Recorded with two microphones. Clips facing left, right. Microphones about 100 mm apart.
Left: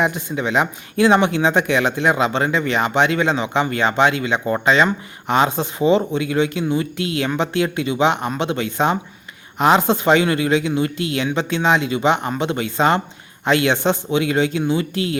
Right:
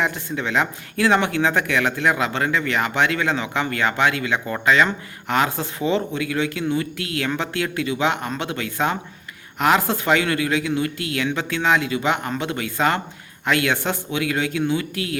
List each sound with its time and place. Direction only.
0.0 s speech: 15° left (ahead or behind)